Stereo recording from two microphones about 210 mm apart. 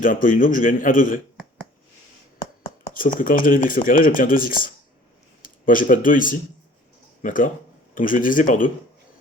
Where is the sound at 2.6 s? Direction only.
40° left (ahead or behind).